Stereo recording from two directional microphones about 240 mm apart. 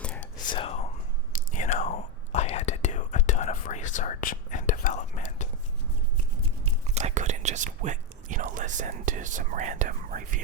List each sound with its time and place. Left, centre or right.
0.0 s whispering: centre
0.5 s whispering: left
6.8 s whispering: right